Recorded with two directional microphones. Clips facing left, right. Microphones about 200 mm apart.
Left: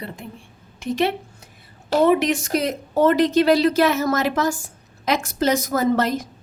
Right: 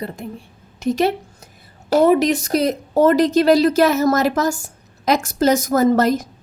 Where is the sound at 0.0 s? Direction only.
40° right (ahead or behind).